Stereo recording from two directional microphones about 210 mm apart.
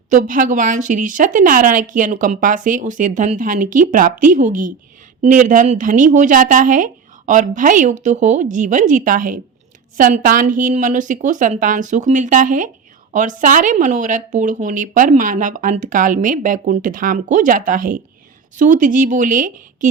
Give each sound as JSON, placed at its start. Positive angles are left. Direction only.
{"t": 0.1, "sound": "speech", "side_deg": -40}